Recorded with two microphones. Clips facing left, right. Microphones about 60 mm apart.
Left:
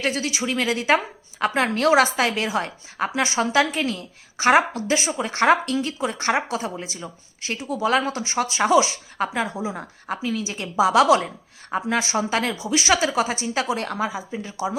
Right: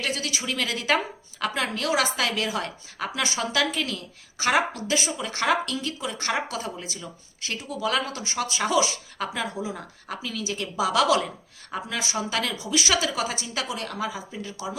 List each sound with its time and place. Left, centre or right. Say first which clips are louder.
0.0 s a woman's voice: left 5 dB; left
1.4 s speech: left 6 dB; left
2.1 s a woman's voice: left 4 dB; left
14.1 s a woman's voice: left 4 dB; left